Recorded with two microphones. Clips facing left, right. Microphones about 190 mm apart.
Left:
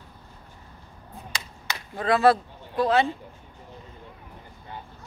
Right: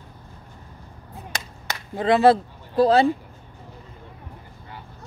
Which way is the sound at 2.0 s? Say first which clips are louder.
Right 3 dB; 25° right (ahead or behind).